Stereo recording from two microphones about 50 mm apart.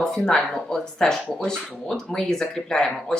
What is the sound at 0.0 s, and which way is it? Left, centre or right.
Speech, centre.